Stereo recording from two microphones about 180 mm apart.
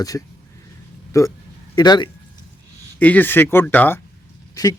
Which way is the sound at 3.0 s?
10° left (ahead or behind).